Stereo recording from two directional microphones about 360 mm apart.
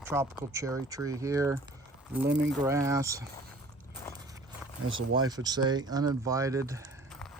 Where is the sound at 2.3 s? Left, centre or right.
Right.